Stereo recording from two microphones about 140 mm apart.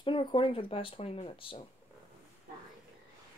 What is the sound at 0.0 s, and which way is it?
Speech, 35° left (ahead or behind).